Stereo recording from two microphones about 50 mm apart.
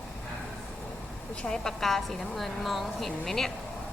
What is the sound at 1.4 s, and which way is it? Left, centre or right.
A woman's voice, centre.